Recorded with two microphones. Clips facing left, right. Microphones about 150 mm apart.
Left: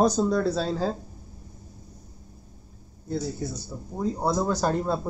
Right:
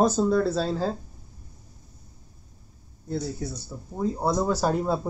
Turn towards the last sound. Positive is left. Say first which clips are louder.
# right 1 dB
turn(degrees=-5)  # may be behind; listen again after turning